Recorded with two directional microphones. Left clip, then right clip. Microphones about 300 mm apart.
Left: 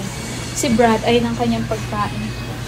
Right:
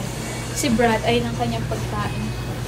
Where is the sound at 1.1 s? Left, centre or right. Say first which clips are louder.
Left 4 dB; centre.